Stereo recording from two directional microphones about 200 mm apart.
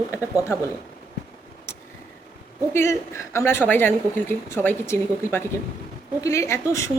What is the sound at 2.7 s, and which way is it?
A woman's voice, 15° left (ahead or behind).